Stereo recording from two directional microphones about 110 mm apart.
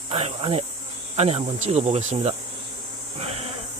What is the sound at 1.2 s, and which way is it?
Speech, 70° right (ahead or behind).